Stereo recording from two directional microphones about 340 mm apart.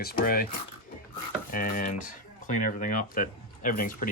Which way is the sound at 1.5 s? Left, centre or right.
Left.